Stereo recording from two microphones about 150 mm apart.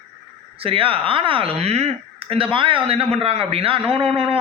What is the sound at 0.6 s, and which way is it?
A man's voice, 40° right (ahead or behind).